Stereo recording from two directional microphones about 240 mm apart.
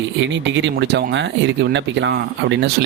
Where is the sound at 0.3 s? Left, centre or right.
Right.